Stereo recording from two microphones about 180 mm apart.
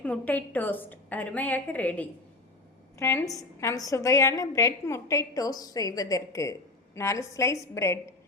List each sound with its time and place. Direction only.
0.0 s a woman's voice: 10° left (ahead or behind)